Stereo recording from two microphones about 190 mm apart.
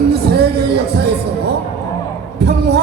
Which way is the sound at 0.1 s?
55° right (ahead or behind).